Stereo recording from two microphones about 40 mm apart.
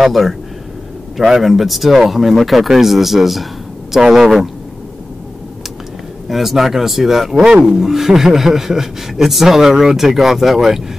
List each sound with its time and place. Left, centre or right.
0.0 s speech: centre
6.2 s speech: centre